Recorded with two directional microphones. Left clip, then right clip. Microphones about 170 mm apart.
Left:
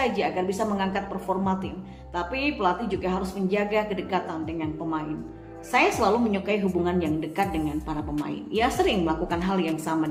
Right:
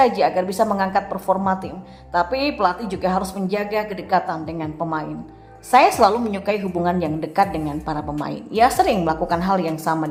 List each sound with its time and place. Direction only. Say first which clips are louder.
0.0 s a woman's voice: right 9 dB; 35° right (ahead or behind)